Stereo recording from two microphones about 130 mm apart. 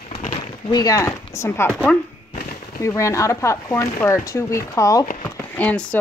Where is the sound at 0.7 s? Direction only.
30° left (ahead or behind).